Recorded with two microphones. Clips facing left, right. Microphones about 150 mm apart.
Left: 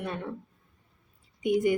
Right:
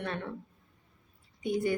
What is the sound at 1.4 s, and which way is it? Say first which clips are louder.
Speech: left 5 dB; 15° left (ahead or behind).